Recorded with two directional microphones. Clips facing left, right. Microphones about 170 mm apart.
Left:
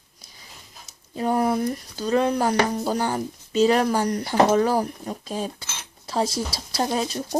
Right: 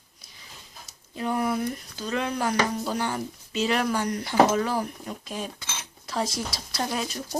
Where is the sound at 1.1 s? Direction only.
40° left (ahead or behind).